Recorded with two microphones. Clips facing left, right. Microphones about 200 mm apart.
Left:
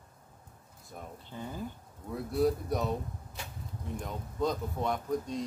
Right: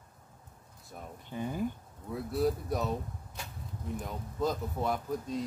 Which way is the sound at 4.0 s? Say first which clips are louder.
Left 1 dB; 5° right (ahead or behind).